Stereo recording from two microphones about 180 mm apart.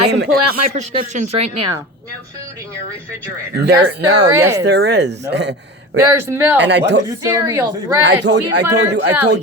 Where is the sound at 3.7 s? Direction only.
70° right (ahead or behind).